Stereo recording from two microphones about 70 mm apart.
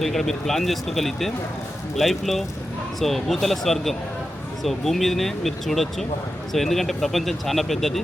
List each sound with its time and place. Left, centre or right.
0.0 s speech: centre